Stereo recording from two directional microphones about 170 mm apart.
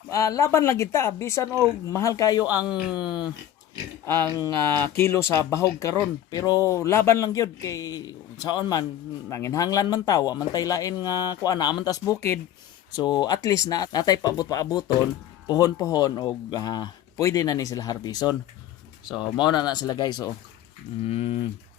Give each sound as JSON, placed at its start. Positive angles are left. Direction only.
{"t": 0.1, "sound": "speech", "side_deg": 20}
{"t": 4.0, "sound": "speech", "side_deg": 15}
{"t": 21.0, "sound": "typing", "side_deg": 35}